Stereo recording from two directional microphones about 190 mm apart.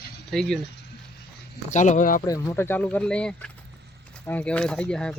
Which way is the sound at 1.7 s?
40° left (ahead or behind).